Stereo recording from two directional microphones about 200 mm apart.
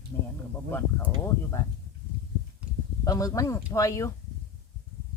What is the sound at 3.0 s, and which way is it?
Speech, 15° left (ahead or behind).